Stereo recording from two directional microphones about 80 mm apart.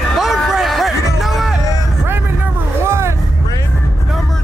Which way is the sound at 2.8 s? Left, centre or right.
Right.